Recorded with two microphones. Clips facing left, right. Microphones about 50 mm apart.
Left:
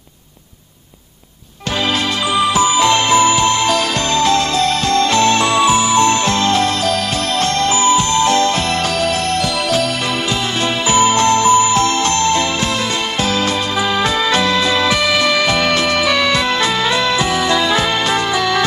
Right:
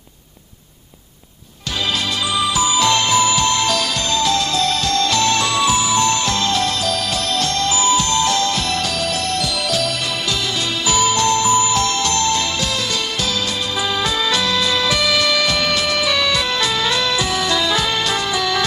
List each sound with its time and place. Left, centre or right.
2.3 s music: left
4.1 s music: left
10.9 s music: left
14.3 s music: left